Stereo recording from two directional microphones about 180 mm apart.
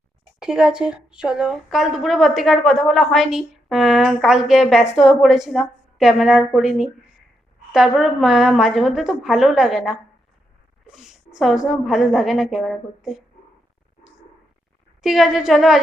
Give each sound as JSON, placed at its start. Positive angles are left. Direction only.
{"t": 0.3, "sound": "a woman's voice", "side_deg": -5}
{"t": 15.0, "sound": "a woman's voice", "side_deg": 0}